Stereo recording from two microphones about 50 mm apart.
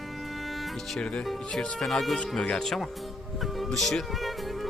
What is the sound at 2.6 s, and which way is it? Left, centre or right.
Speech, centre.